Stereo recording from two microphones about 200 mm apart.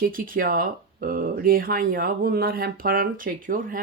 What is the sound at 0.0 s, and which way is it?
Speech, 45° right (ahead or behind).